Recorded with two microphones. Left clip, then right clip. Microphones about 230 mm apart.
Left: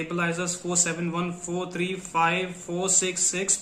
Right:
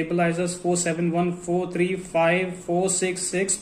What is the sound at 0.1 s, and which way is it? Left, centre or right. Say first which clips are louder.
A man's voice: right 3 dB; centre.